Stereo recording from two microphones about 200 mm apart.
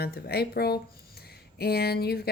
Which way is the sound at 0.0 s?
50° left (ahead or behind).